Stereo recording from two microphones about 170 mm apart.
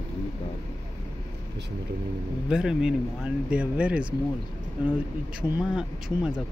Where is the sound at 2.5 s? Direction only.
5° right (ahead or behind).